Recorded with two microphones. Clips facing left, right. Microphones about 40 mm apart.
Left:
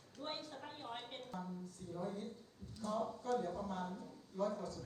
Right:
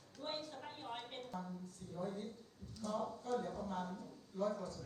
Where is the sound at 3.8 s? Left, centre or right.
Left.